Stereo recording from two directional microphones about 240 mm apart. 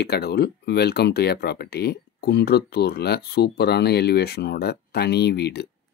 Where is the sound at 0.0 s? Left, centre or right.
Left.